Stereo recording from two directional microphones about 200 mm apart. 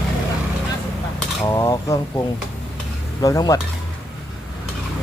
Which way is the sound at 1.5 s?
15° left (ahead or behind).